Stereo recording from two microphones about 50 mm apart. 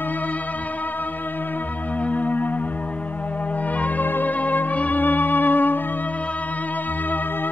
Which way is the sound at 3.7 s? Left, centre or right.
Left.